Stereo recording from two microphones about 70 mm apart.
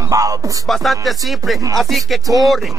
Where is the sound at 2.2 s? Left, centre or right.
Right.